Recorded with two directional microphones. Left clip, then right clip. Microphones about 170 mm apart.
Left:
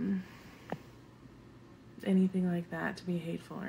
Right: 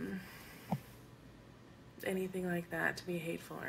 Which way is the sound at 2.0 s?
15° left (ahead or behind).